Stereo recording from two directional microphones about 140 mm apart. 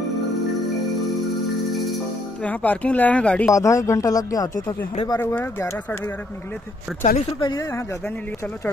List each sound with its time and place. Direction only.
1.7 s music: centre (ahead or behind)
2.4 s speech: 10° left (ahead or behind)
3.5 s speech: 20° left (ahead or behind)
5.3 s speech: 15° left (ahead or behind)
7.0 s speech: 70° left (ahead or behind)